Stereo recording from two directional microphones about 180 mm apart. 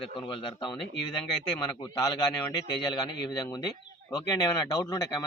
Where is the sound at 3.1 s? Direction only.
25° left (ahead or behind).